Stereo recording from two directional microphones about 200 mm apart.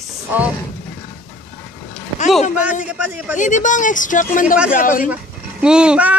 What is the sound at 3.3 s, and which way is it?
Speech, 40° left (ahead or behind).